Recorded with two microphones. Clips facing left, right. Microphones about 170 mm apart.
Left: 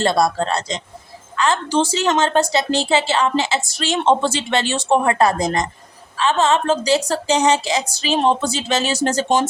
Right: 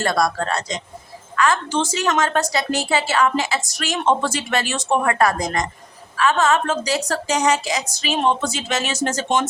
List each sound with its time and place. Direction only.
0.0 s a woman's voice: 25° left (ahead or behind)